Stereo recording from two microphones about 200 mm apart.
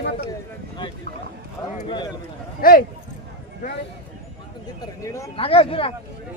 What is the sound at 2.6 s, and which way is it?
Speech, 45° left (ahead or behind).